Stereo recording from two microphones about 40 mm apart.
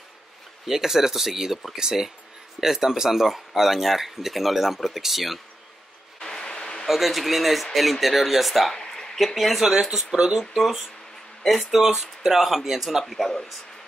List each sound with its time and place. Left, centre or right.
0.7 s speech: centre
6.2 s a sound: centre
6.9 s speech: centre
8.7 s a sound: centre
9.6 s speech: centre
11.8 s speech: centre
13.0 s speech: centre